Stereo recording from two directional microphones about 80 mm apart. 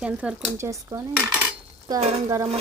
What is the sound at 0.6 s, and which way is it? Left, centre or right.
Speech, right.